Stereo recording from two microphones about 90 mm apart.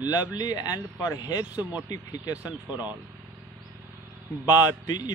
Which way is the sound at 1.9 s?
45° left (ahead or behind).